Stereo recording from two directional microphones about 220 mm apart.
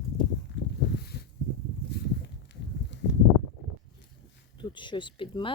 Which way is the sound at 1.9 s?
50° left (ahead or behind).